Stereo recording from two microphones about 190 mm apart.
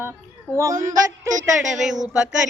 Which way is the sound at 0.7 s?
40° right (ahead or behind).